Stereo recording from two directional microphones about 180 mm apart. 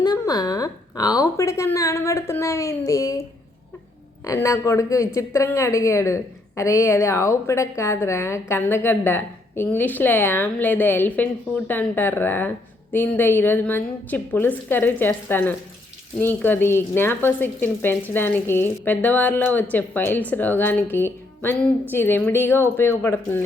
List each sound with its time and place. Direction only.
0.0 s a woman's voice: 20° left (ahead or behind)